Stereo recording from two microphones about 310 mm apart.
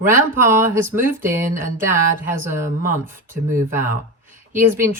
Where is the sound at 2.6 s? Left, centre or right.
Centre.